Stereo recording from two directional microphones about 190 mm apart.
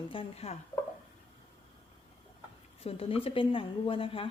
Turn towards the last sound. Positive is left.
turn(degrees=30)  # may be behind; listen again after turning